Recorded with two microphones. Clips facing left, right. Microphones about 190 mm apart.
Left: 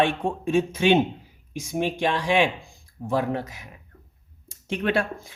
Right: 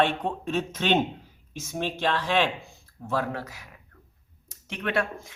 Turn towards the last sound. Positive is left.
turn(degrees=30)  # may be behind; listen again after turning